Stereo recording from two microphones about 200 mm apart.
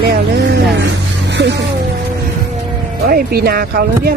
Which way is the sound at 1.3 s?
60° right (ahead or behind).